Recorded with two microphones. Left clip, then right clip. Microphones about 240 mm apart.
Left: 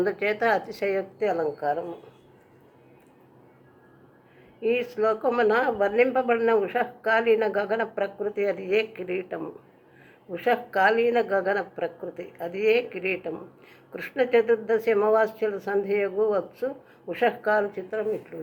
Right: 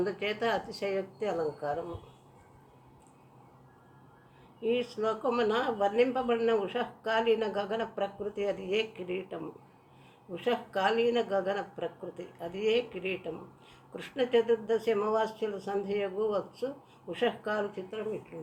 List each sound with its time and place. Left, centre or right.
0.0 s a woman's voice: centre
4.6 s a woman's voice: centre